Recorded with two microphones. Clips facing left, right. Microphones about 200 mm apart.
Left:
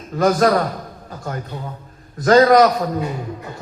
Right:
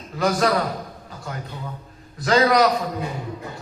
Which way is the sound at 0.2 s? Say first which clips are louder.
Left 5 dB; 45° left (ahead or behind).